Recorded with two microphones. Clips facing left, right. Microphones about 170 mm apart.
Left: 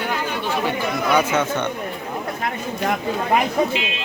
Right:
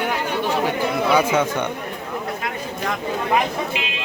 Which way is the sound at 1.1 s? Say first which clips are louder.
Even; 10° right (ahead or behind).